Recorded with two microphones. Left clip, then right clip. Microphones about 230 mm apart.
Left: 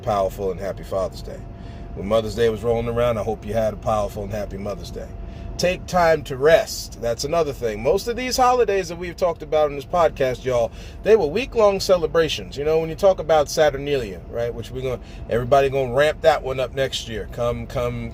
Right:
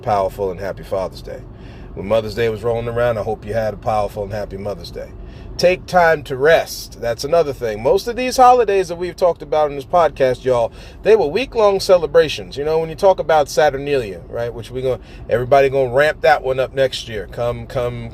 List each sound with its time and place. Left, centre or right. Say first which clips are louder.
0.0 s speech: right 4 dB; right